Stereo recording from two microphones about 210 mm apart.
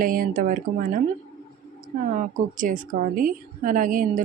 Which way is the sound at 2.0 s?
40° right (ahead or behind).